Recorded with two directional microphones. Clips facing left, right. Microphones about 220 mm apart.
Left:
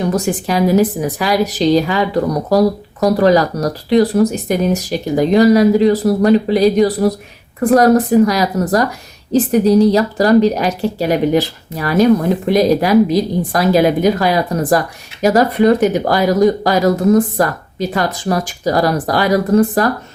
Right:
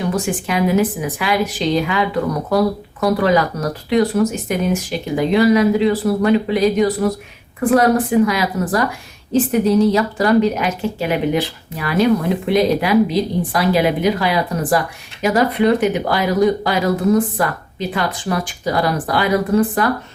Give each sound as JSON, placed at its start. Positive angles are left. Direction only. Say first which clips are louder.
{"t": 0.0, "sound": "speech", "louder": "left 3 dB", "side_deg": 40}